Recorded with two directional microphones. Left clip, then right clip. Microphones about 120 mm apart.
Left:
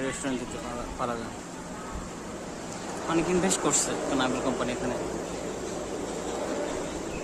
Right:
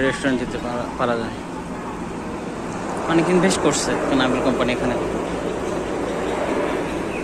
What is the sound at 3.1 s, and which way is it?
Speech, 25° left (ahead or behind).